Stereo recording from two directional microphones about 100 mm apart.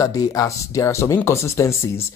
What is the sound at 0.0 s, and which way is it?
Speech, 35° left (ahead or behind).